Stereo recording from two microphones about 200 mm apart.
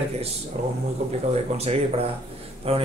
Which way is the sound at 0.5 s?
30° right (ahead or behind).